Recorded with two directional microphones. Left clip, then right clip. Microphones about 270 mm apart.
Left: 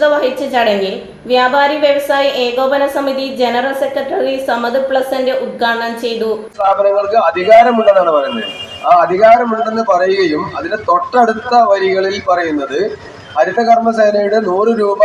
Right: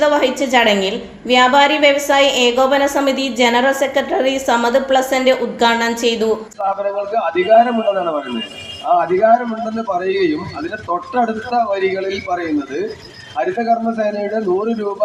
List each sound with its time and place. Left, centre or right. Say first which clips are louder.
0.5 s a woman's voice: even; right